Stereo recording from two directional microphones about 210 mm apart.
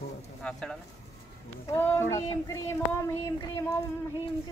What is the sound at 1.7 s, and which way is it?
Child singing, 10° left (ahead or behind).